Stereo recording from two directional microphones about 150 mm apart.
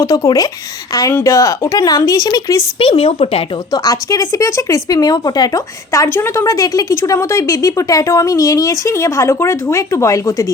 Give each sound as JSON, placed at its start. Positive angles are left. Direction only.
{"t": 0.0, "sound": "speech", "side_deg": 25}
{"t": 2.7, "sound": "speech", "side_deg": 35}
{"t": 3.7, "sound": "speech", "side_deg": 25}